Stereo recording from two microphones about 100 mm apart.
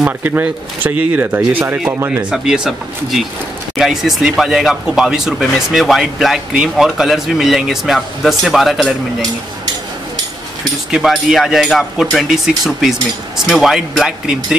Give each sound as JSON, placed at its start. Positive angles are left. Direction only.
{"t": 0.0, "sound": "speech", "side_deg": -15}
{"t": 2.3, "sound": "speech", "side_deg": -5}
{"t": 10.9, "sound": "speech", "side_deg": -5}